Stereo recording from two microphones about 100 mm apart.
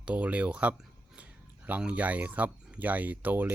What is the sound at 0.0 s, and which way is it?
Speech, 15° right (ahead or behind).